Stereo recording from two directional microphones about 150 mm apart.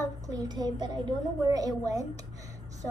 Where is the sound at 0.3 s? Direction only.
25° right (ahead or behind).